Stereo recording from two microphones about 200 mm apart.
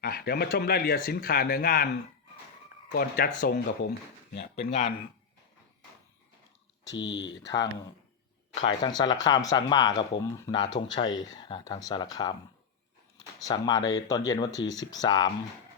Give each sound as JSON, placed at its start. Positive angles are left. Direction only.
{"t": 0.0, "sound": "speech", "side_deg": 50}
{"t": 2.9, "sound": "speech", "side_deg": 50}
{"t": 4.7, "sound": "speech", "side_deg": 35}
{"t": 7.0, "sound": "speech", "side_deg": 65}
{"t": 7.4, "sound": "speech", "side_deg": 20}
{"t": 8.8, "sound": "speech", "side_deg": 20}
{"t": 11.0, "sound": "speech", "side_deg": 70}
{"t": 11.3, "sound": "speech", "side_deg": 20}
{"t": 13.4, "sound": "speech", "side_deg": 20}